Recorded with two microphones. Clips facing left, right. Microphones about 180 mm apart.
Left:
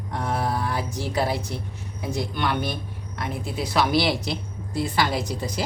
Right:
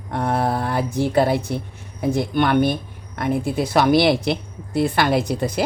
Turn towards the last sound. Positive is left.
turn(degrees=-60)  # may be behind; listen again after turning